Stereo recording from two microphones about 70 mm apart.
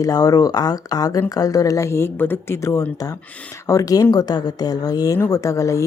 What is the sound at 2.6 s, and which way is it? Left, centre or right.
A woman's voice, left.